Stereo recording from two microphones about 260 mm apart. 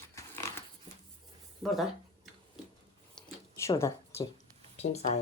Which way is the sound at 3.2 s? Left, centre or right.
Centre.